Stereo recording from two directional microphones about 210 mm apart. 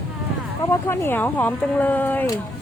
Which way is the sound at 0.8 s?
10° left (ahead or behind).